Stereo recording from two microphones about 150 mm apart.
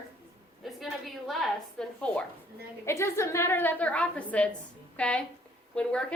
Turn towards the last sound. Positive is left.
turn(degrees=5)  # may be behind; listen again after turning